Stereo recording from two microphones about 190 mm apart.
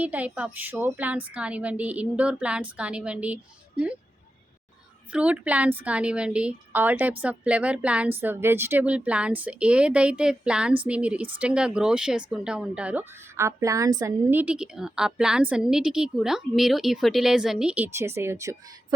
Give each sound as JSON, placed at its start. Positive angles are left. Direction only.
{"t": 0.0, "sound": "a woman's voice", "side_deg": -10}
{"t": 5.1, "sound": "a woman's voice", "side_deg": -5}